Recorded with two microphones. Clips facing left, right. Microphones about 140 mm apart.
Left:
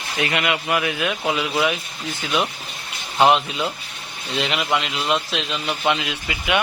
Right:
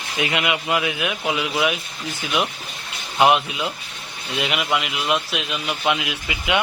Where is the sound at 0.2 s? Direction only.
15° right (ahead or behind).